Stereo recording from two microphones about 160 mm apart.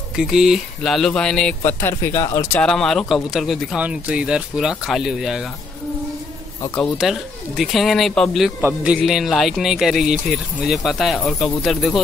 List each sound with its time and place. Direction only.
0.2 s speech: 5° right (ahead or behind); by 2.6 s 20° left (ahead or behind)
2.6 s speech: 5° left (ahead or behind)
7.0 s speech: centre (ahead or behind)
8.5 s speech: 10° right (ahead or behind)